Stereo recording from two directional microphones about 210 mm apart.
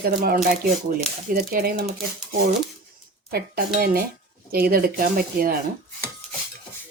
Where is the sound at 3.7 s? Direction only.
45° right (ahead or behind).